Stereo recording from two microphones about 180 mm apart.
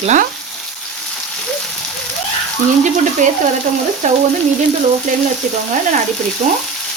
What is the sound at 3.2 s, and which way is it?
Frying, 45° right (ahead or behind).